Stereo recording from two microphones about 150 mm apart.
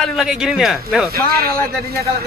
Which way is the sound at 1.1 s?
90° right.